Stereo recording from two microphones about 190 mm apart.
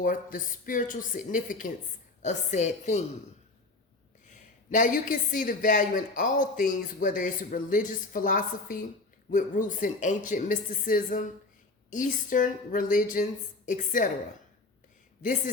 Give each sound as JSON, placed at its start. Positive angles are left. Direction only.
{"t": 0.0, "sound": "a woman's voice", "side_deg": 45}
{"t": 4.3, "sound": "speech", "side_deg": 40}